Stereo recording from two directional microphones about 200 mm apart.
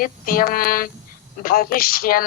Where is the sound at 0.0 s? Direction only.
45° left (ahead or behind).